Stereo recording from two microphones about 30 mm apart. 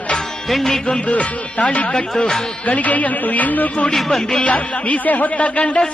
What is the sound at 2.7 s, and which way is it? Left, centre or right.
Music, left.